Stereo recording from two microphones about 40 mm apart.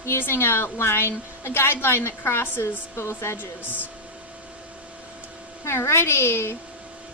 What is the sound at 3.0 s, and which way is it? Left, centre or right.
Speech, left.